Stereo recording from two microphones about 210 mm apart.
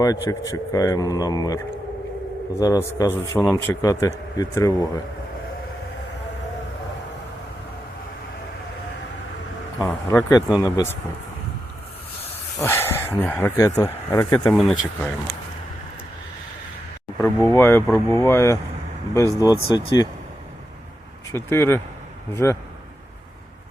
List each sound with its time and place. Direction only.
0.3 s a man's voice: 15° left (ahead or behind)
9.7 s a man's voice: 15° left (ahead or behind)
12.5 s speech: 10° left (ahead or behind)
14.4 s speech: centre (ahead or behind)
17.2 s a man's voice: 10° left (ahead or behind)
19.5 s speech: 25° left (ahead or behind)
21.3 s a man's voice: 10° left (ahead or behind)